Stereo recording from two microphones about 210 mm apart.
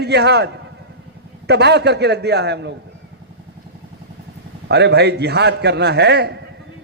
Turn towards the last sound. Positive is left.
turn(degrees=-50)  # may be behind; listen again after turning